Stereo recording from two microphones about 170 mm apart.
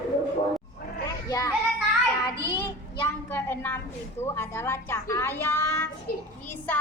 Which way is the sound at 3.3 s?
10° left (ahead or behind).